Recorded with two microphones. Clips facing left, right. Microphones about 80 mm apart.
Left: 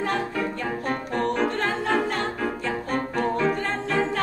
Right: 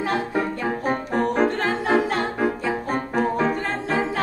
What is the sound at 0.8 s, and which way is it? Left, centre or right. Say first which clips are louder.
Music: right 3 dB; centre.